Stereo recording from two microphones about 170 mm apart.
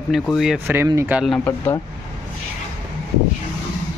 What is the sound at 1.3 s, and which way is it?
Speech, 10° left (ahead or behind).